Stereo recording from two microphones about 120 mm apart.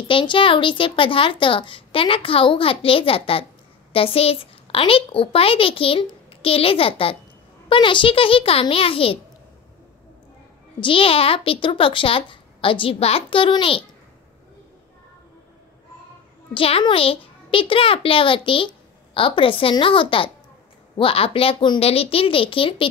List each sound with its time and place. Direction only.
0.1 s a child's voice: 45° left (ahead or behind)
10.8 s a child's voice: 50° left (ahead or behind)
16.5 s a child's voice: 50° left (ahead or behind)